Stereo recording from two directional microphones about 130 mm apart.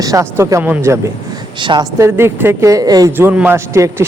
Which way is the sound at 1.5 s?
35° right (ahead or behind).